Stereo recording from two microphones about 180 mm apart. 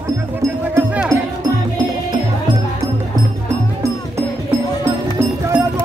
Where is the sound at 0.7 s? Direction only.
5° right (ahead or behind).